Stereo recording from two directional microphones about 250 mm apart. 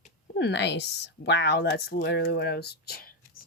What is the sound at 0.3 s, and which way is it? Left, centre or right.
Speech, left.